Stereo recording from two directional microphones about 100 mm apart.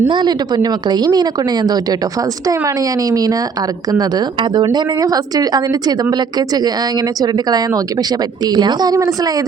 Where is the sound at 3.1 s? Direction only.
40° right (ahead or behind).